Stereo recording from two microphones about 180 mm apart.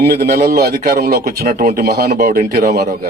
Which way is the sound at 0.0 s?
60° right (ahead or behind).